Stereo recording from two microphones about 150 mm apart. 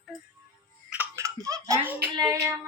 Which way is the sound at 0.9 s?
15° right (ahead or behind).